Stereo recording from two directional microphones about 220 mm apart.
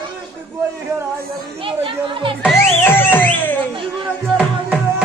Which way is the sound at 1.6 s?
25° right (ahead or behind).